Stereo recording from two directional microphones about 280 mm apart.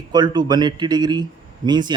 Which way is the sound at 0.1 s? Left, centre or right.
Centre.